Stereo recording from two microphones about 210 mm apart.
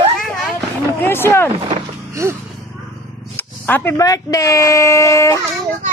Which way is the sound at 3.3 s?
10° left (ahead or behind).